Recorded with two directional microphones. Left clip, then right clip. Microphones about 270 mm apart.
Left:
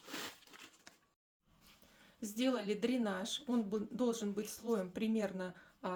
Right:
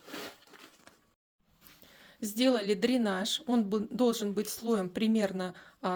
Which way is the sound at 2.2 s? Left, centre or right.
Right.